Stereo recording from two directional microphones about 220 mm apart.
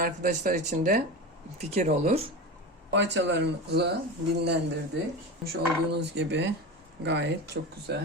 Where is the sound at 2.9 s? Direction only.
55° right (ahead or behind).